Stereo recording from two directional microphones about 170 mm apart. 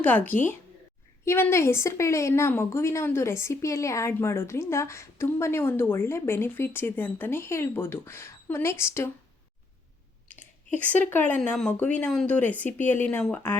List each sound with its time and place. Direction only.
0.0 s speech: 10° left (ahead or behind)
11.1 s speech: 10° left (ahead or behind)